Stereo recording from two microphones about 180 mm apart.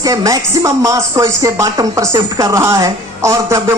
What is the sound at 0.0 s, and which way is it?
Speech, 20° right (ahead or behind).